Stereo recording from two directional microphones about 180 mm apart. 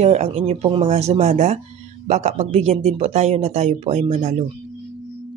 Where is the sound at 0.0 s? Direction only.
40° right (ahead or behind).